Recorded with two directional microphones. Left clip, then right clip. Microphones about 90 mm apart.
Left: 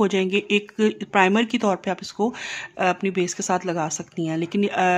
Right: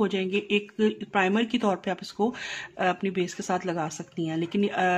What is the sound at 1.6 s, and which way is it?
Speech, 30° left (ahead or behind).